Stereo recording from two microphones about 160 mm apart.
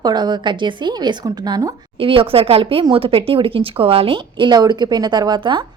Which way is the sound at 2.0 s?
35° right (ahead or behind).